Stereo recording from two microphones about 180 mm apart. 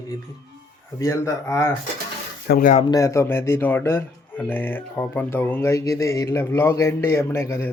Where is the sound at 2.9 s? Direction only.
15° left (ahead or behind).